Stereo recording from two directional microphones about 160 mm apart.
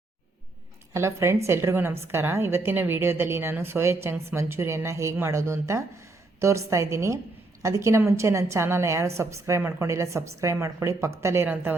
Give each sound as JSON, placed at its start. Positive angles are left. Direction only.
{"t": 0.9, "sound": "a woman's voice", "side_deg": -15}